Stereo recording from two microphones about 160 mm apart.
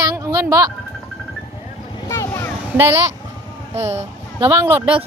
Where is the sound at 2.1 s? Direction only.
15° left (ahead or behind).